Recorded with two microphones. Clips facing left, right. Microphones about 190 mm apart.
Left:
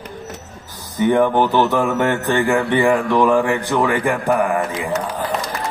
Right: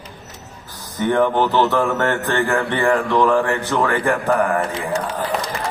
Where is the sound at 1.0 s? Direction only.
15° left (ahead or behind).